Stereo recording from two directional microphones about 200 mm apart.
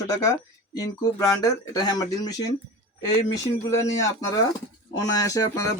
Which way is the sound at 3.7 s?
15° left (ahead or behind).